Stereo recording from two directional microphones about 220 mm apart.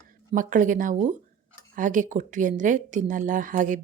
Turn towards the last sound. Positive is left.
turn(degrees=-35)  # may be behind; listen again after turning